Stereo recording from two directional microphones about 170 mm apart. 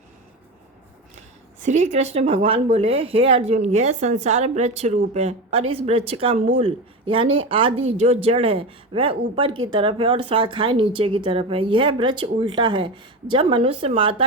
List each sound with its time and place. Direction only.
1.6 s speech: 40° right (ahead or behind)